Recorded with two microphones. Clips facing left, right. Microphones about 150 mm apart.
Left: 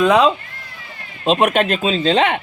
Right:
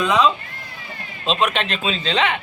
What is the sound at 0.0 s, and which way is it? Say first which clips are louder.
Speech: left 4 dB; 55° left (ahead or behind).